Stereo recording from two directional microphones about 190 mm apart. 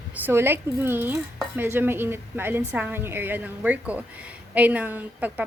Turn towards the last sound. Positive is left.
turn(degrees=-10)  # may be behind; listen again after turning